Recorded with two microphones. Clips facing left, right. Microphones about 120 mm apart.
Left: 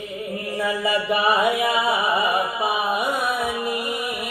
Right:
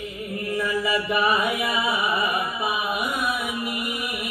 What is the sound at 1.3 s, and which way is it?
Music, 30° left (ahead or behind).